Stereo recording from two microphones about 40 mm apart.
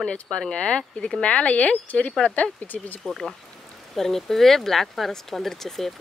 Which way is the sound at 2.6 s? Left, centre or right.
Left.